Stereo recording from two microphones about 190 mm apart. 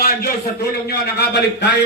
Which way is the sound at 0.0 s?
50° left (ahead or behind).